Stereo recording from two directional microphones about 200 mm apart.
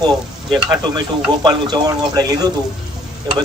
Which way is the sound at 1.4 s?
20° right (ahead or behind).